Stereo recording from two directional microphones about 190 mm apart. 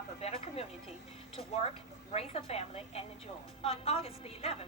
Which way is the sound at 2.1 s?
30° left (ahead or behind).